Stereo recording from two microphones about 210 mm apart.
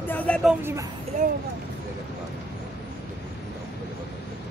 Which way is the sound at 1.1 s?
35° right (ahead or behind).